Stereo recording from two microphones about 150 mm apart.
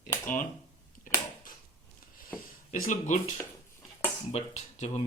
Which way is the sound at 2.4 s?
65° left (ahead or behind).